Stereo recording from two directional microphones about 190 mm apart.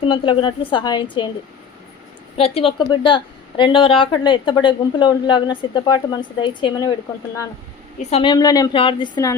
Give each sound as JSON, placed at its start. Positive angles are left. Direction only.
{"t": 0.0, "sound": "a woman's voice", "side_deg": 25}
{"t": 2.4, "sound": "a woman's voice", "side_deg": 30}
{"t": 7.9, "sound": "a woman's voice", "side_deg": 30}